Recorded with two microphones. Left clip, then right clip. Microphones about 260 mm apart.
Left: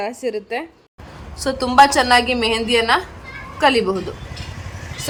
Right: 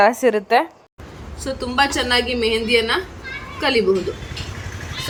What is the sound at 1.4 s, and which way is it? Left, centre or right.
A woman's voice, centre.